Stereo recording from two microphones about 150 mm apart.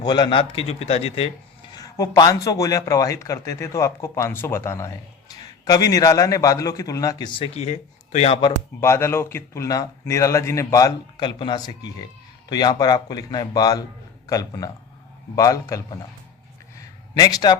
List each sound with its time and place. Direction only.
0.0 s a man's voice: 30° left (ahead or behind)
1.7 s a man's voice: 25° left (ahead or behind)
7.3 s speech: 40° left (ahead or behind)
8.8 s a man's voice: 15° left (ahead or behind)
17.2 s a man's voice: 25° left (ahead or behind)